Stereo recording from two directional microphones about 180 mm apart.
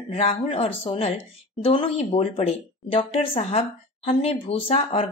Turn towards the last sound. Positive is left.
turn(degrees=35)  # may be behind; listen again after turning